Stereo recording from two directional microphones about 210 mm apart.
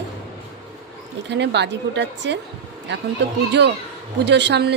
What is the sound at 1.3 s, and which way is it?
Speech, 55° right (ahead or behind).